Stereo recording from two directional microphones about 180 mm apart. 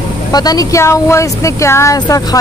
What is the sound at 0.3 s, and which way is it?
Speech, 20° left (ahead or behind).